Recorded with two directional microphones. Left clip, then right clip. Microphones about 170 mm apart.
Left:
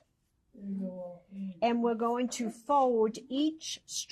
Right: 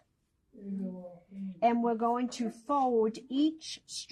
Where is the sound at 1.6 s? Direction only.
50° left (ahead or behind).